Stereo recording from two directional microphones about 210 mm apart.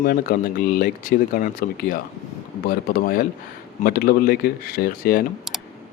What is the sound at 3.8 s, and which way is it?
Speech, 45° left (ahead or behind).